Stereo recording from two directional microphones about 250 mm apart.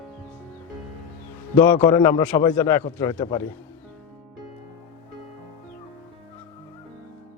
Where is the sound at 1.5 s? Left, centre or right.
Centre.